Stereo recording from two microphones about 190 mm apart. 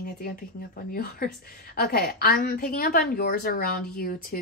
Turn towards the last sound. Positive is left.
turn(degrees=50)  # may be behind; listen again after turning